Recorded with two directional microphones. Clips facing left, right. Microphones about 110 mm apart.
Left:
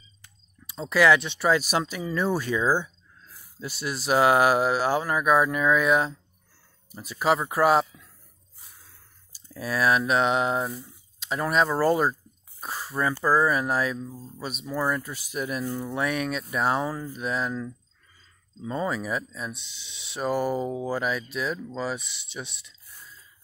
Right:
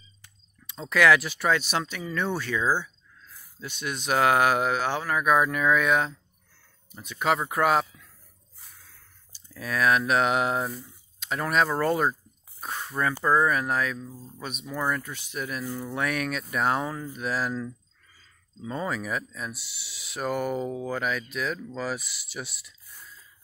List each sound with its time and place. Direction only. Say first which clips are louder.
0.7 s speech: left 1 dB; 5° left (ahead or behind)
1.5 s speech: left 3 dB; 10° left (ahead or behind)